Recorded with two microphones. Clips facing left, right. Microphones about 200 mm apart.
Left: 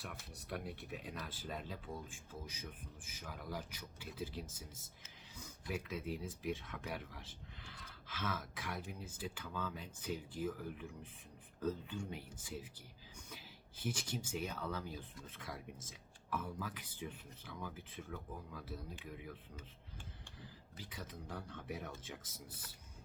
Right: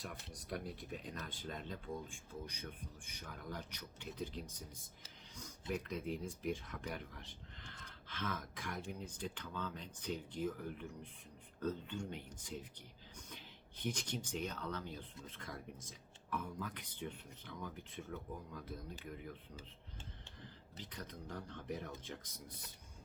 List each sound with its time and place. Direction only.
0.4 s speech: centre (ahead or behind)
20.4 s speech: 5° left (ahead or behind)